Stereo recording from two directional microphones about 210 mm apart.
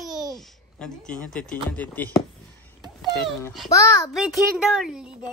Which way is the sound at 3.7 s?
15° left (ahead or behind).